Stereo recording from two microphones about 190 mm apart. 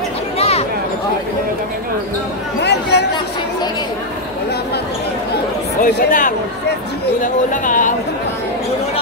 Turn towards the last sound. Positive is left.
turn(degrees=45)  # may be behind; listen again after turning